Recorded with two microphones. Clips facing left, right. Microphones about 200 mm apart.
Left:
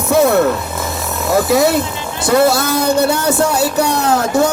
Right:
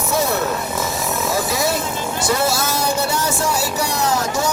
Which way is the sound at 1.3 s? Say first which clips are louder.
Left 12 dB; 60° left (ahead or behind).